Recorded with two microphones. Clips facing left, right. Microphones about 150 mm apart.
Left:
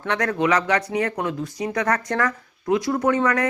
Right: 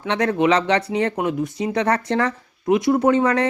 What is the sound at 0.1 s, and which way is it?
Speech, 20° right (ahead or behind).